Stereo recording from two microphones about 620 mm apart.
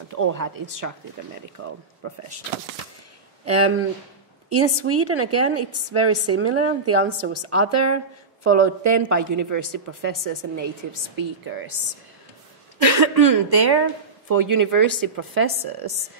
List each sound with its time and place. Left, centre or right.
0.1 s a woman's voice: right
1.6 s a woman's voice: centre
3.4 s a woman's voice: right
12.9 s a woman's voice: right